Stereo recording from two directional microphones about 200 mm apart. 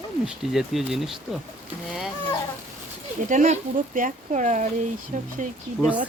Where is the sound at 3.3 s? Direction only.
35° right (ahead or behind).